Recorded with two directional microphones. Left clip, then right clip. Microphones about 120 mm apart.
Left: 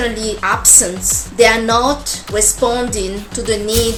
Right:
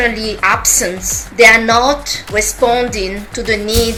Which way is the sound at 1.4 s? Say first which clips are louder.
Right 4 dB; 35° left (ahead or behind).